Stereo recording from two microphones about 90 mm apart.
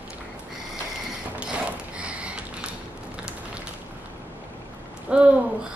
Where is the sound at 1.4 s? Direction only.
10° right (ahead or behind).